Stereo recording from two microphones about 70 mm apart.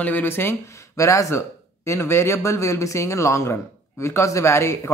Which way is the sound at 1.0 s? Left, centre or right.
Left.